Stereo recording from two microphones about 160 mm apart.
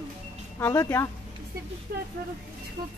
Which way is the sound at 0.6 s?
20° left (ahead or behind).